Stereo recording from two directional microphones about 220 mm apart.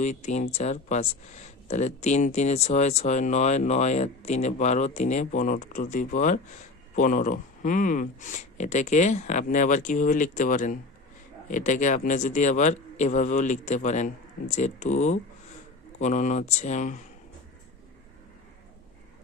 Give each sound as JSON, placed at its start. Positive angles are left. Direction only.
{"t": 0.0, "sound": "speech", "side_deg": 30}